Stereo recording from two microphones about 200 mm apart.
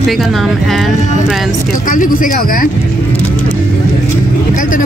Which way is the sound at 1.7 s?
45° left (ahead or behind).